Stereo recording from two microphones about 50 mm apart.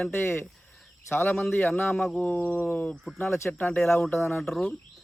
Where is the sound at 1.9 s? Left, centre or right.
Centre.